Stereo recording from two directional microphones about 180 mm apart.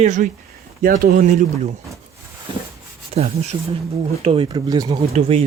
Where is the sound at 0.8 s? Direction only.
50° right (ahead or behind).